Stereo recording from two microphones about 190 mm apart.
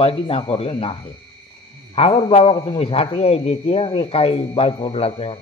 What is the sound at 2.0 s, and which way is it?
A man's voice, 30° left (ahead or behind).